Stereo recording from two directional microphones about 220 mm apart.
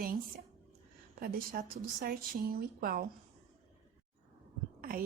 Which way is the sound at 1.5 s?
40° right (ahead or behind).